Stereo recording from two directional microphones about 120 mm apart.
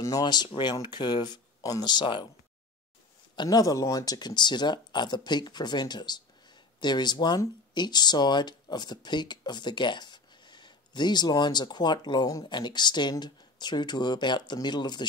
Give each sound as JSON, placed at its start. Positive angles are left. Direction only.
{"t": 0.0, "sound": "speech", "side_deg": 35}
{"t": 3.3, "sound": "speech", "side_deg": 30}